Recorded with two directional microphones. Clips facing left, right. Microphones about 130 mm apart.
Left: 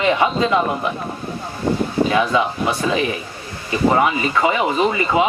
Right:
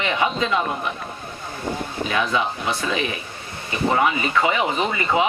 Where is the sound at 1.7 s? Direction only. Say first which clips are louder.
Left 7 dB; 50° left (ahead or behind).